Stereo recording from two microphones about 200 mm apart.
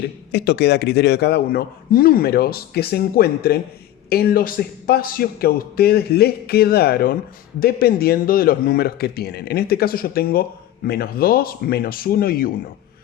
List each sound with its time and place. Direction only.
0.3 s a man's voice: 55° left (ahead or behind)